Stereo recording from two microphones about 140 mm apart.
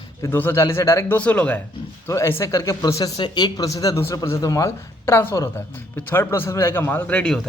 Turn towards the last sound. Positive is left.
turn(degrees=5)  # may be behind; listen again after turning